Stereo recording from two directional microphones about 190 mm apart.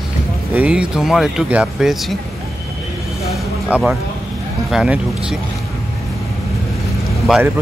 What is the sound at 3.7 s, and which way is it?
Speech, 5° right (ahead or behind).